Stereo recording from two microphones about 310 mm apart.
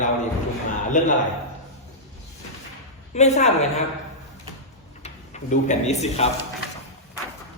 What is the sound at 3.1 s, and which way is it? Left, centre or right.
Speech, left.